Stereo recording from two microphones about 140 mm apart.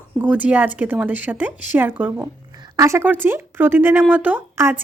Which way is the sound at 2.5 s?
25° right (ahead or behind).